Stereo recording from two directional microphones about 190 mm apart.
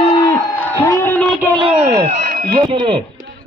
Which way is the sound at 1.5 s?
30° right (ahead or behind).